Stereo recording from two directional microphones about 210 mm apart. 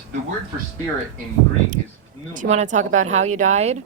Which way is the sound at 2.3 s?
35° right (ahead or behind).